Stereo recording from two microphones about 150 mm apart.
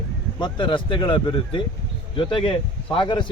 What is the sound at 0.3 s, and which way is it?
A man's voice, 30° left (ahead or behind).